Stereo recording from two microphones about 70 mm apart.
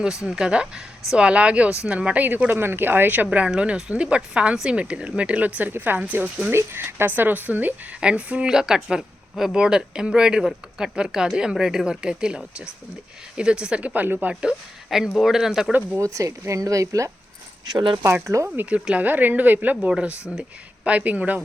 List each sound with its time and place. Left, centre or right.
0.3 s speech: centre
6.5 s speech: right
14.4 s speech: centre
16.0 s speech: right
18.4 s speech: right